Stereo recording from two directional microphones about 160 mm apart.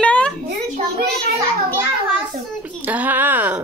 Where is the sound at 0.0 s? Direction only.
5° left (ahead or behind).